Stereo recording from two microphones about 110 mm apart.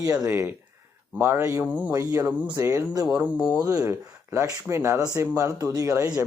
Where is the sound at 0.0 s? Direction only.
25° right (ahead or behind).